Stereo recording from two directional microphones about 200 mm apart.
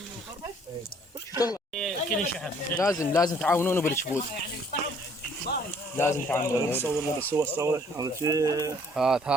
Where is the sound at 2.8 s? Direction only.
15° left (ahead or behind).